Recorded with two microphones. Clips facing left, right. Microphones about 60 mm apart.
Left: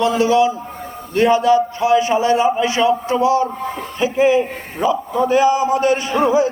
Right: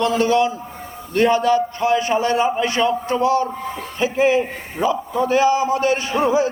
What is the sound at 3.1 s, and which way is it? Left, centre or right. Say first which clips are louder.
Speech: left 2 dB; right.